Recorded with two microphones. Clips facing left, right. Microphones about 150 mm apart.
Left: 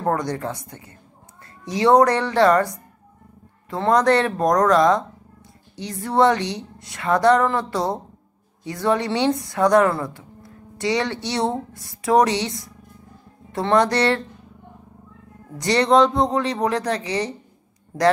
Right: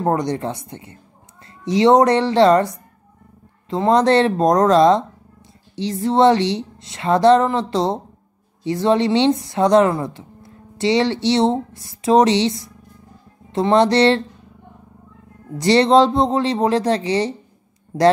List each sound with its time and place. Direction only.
0.0 s a woman's voice: 20° right (ahead or behind)
15.5 s a woman's voice: 30° right (ahead or behind)